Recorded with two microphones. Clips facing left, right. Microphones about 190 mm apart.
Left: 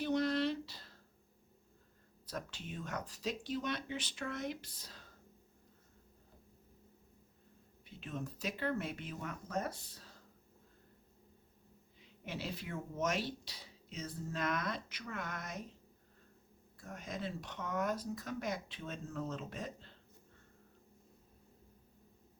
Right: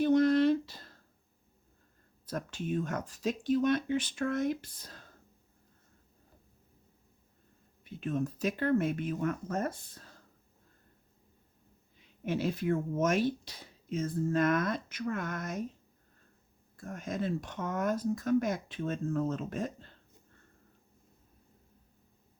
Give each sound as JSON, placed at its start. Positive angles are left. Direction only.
{"t": 0.0, "sound": "a sound", "side_deg": -50}
{"t": 2.2, "sound": "speech", "side_deg": -50}
{"t": 7.9, "sound": "speech", "side_deg": -50}
{"t": 12.2, "sound": "speech", "side_deg": -50}
{"t": 16.7, "sound": "speech", "side_deg": -50}